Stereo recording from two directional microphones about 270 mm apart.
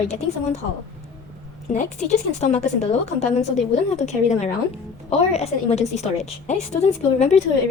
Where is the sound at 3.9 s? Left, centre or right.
Left.